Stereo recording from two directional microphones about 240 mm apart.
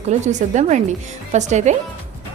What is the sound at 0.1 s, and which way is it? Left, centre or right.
A woman's voice, right.